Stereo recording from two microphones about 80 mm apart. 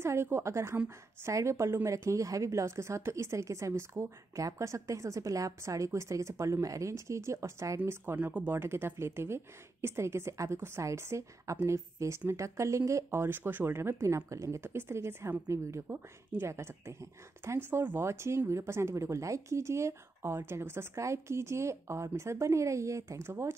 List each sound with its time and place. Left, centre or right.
0.0 s speech: right